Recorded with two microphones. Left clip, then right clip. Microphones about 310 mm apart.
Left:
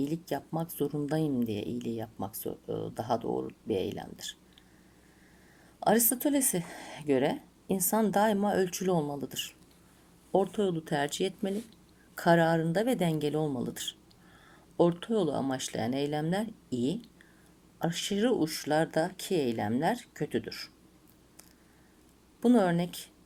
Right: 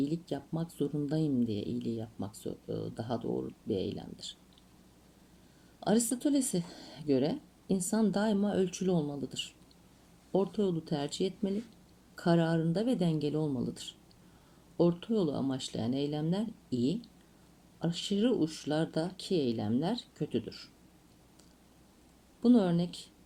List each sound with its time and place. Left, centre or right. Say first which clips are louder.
0.0 s speech: left 2 dB; left
6.2 s speech: left 2 dB; left
14.8 s speech: left 3 dB; left
22.4 s speech: left 2 dB; left